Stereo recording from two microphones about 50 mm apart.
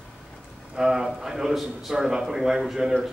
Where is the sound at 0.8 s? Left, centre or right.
Centre.